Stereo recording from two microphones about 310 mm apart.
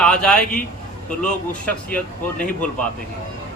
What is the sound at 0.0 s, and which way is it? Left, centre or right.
A man's voice, centre.